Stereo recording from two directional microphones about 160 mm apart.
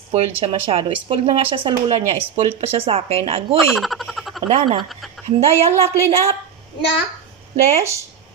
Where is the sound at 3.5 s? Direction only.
Centre (ahead or behind).